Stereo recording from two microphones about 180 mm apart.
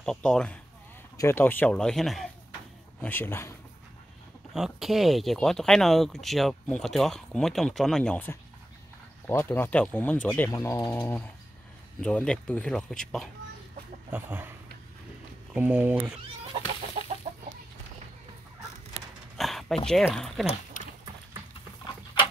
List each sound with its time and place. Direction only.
0.0 s speech: 5° left (ahead or behind)
4.6 s speech: centre (ahead or behind)
14.1 s speech: 10° right (ahead or behind)
15.5 s speech: 10° right (ahead or behind)
17.3 s chicken: 40° right (ahead or behind)
19.3 s speech: centre (ahead or behind)